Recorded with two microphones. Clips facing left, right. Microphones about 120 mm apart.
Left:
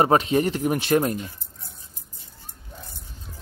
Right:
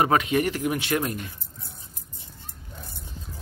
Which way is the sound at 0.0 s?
30° left (ahead or behind).